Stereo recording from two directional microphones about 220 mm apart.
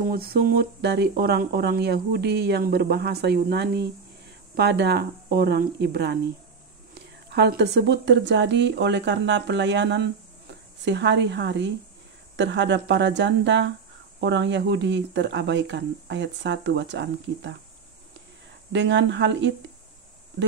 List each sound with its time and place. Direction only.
0.0 s speech: 45° right (ahead or behind)
18.7 s speech: 55° right (ahead or behind)